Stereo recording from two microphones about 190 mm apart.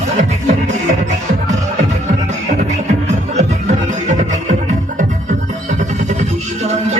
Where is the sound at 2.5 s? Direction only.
35° right (ahead or behind).